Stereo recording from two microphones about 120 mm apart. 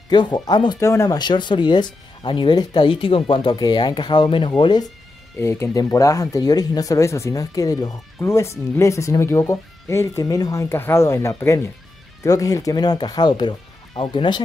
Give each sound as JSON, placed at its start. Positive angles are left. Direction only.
{"t": 0.1, "sound": "speech", "side_deg": 40}
{"t": 0.7, "sound": "speech", "side_deg": 25}
{"t": 5.4, "sound": "speech", "side_deg": 20}